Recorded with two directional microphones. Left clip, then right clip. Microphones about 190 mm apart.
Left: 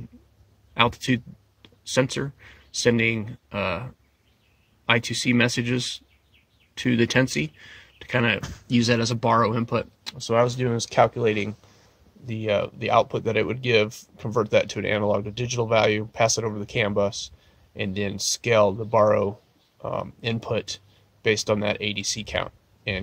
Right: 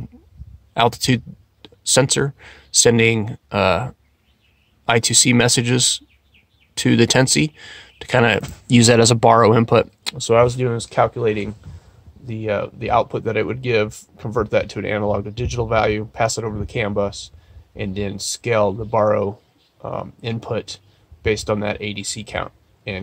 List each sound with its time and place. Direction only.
0.7 s a sound: 35° right (ahead or behind)
2.0 s speech: 35° right (ahead or behind)
8.6 s speech: 50° right (ahead or behind)
10.3 s speech: 15° right (ahead or behind)
10.7 s speech: 5° left (ahead or behind)